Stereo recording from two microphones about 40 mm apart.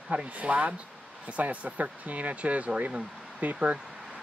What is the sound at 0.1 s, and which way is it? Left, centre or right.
Speech, right.